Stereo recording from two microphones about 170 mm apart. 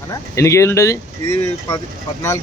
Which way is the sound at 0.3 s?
15° left (ahead or behind).